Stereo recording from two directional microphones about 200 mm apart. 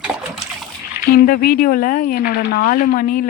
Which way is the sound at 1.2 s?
45° left (ahead or behind).